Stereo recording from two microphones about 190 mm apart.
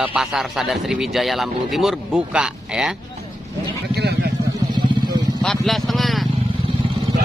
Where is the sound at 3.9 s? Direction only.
60° right (ahead or behind).